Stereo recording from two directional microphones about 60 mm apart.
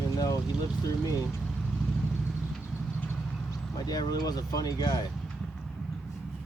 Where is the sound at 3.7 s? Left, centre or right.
Left.